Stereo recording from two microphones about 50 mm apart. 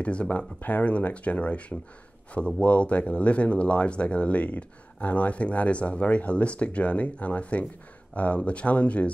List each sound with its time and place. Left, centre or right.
0.0 s speech: left